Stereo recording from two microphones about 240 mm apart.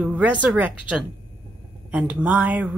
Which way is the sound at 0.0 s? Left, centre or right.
Centre.